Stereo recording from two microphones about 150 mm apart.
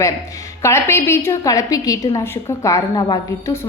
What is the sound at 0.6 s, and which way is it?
A woman's voice, 15° left (ahead or behind).